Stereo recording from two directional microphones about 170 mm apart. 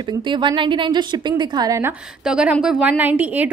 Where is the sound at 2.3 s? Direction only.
5° right (ahead or behind).